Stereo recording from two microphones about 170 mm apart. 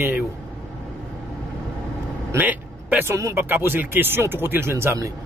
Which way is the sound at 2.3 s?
10° right (ahead or behind).